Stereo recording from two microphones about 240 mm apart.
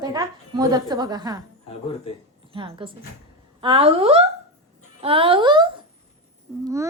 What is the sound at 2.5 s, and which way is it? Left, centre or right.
Speech, right.